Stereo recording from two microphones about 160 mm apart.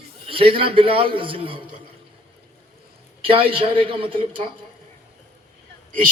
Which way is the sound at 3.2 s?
35° right (ahead or behind).